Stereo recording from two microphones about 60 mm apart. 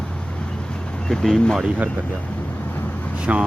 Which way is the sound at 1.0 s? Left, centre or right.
Centre.